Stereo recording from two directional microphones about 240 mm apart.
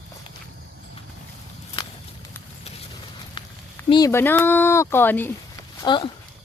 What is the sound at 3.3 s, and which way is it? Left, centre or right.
Speech, centre.